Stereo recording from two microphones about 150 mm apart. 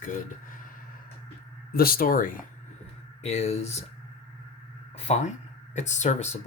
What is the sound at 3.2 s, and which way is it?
Speech, 45° left (ahead or behind).